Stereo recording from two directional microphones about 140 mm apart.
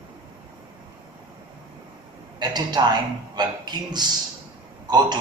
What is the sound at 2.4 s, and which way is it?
A man's voice, 30° right (ahead or behind).